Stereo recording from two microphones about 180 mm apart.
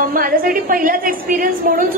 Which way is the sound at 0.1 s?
55° right (ahead or behind).